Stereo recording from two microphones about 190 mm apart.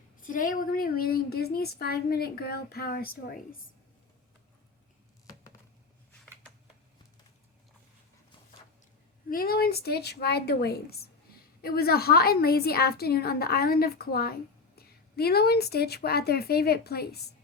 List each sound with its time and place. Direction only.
0.2 s a woman's voice: 45° left (ahead or behind)
9.3 s a woman's voice: 50° left (ahead or behind)